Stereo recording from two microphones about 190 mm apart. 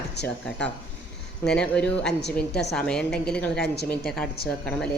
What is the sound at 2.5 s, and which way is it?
Speech, 60° left (ahead or behind).